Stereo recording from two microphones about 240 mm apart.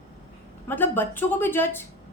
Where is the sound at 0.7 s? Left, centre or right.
Centre.